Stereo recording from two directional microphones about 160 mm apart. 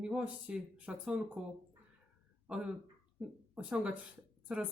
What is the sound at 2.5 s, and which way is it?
A woman's voice, 5° right (ahead or behind).